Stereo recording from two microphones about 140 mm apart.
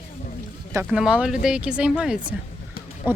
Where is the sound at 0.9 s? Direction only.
5° right (ahead or behind).